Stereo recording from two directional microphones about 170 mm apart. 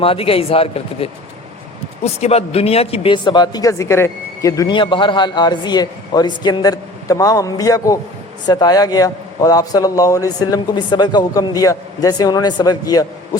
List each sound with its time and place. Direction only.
0.0 s speech: 35° left (ahead or behind)
2.2 s a woman's voice: 35° left (ahead or behind); by 13.1 s 20° left (ahead or behind)